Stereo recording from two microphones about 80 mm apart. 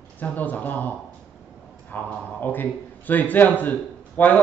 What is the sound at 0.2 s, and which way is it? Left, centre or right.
A man's voice, left.